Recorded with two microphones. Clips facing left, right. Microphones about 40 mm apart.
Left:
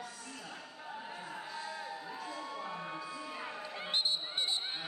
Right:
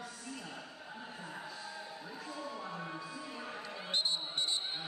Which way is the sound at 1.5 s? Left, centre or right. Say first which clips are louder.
Left 4 dB; left.